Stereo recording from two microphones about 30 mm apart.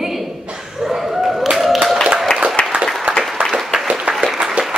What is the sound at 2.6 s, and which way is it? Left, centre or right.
Applause, left.